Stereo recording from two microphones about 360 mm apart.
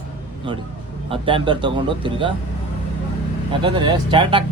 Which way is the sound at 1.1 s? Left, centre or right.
Centre.